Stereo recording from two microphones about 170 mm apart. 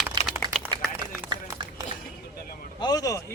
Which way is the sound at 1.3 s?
25° right (ahead or behind).